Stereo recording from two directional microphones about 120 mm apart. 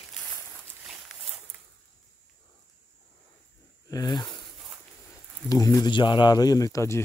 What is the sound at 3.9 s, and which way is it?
Speech, 35° left (ahead or behind).